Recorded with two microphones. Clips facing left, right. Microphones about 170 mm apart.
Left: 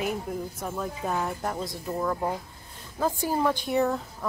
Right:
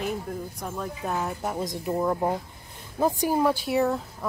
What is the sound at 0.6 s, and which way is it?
Speech, centre (ahead or behind).